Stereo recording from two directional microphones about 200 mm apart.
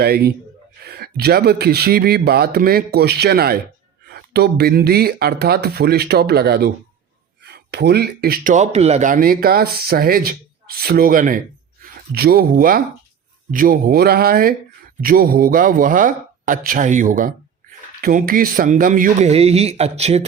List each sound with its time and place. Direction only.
0.0 s speech: 50° right (ahead or behind); by 20.2 s 30° right (ahead or behind)